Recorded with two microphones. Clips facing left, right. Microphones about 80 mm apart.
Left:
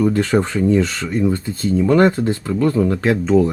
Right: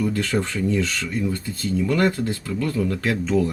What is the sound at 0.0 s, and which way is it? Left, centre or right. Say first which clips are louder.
Speech: left 7 dB; left.